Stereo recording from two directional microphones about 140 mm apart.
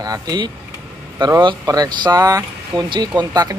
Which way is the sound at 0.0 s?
25° right (ahead or behind).